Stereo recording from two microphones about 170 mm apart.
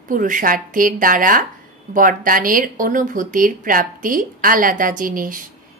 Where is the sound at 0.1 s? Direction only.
55° right (ahead or behind).